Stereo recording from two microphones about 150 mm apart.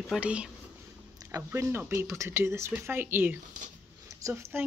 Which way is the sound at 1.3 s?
20° right (ahead or behind).